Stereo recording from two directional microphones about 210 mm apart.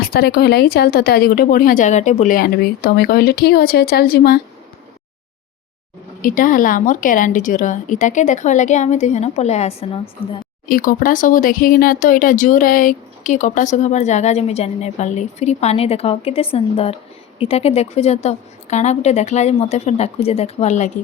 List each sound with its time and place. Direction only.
0.0 s a woman's voice: 45° left (ahead or behind)
6.2 s speech: 40° left (ahead or behind); by 10.3 s 25° left (ahead or behind)
10.7 s speech: 40° left (ahead or behind)